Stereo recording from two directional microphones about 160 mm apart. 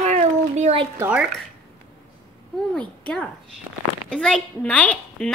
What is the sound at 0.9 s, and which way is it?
Speech, 10° right (ahead or behind).